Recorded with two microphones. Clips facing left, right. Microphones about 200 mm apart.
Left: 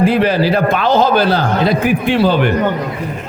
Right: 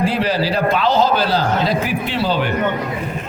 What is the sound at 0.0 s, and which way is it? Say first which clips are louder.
A man's voice: left 6 dB; 55° left (ahead or behind).